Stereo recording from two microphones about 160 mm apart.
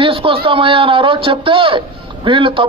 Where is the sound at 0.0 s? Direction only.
35° right (ahead or behind).